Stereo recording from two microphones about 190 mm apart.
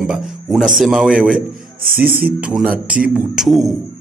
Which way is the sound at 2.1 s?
50° right (ahead or behind).